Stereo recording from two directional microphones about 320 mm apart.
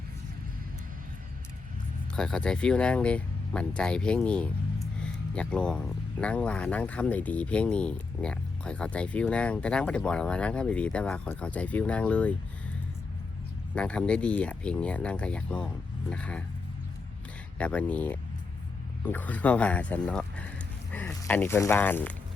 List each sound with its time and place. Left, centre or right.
2.1 s speech: centre
13.7 s speech: centre
17.6 s speech: centre